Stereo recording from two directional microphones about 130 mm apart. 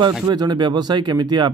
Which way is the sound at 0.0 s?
30° right (ahead or behind).